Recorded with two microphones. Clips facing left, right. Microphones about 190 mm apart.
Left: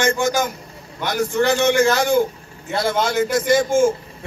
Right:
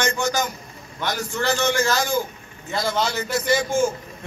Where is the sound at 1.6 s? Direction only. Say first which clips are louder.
Left 6 dB; 55° left (ahead or behind).